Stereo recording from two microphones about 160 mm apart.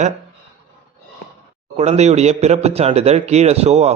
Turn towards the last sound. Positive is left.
turn(degrees=-40)  # may be behind; listen again after turning